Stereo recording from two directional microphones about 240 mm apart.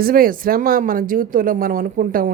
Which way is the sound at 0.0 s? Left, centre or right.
Right.